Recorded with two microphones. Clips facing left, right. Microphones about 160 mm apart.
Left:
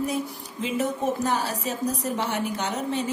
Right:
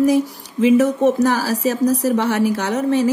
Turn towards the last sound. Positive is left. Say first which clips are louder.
# right 10 dB
turn(degrees=-80)